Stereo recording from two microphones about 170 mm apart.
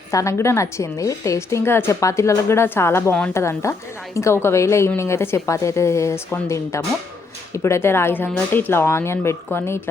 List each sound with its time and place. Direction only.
0.1 s a woman's voice: 20° left (ahead or behind)